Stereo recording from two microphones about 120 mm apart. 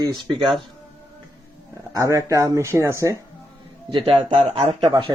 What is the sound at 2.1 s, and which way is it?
Speech, 25° right (ahead or behind).